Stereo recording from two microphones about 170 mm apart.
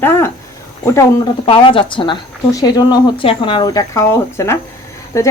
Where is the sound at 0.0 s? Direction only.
15° left (ahead or behind).